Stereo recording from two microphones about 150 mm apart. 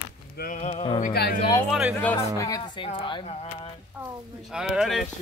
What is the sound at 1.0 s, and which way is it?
Speech, 90° left.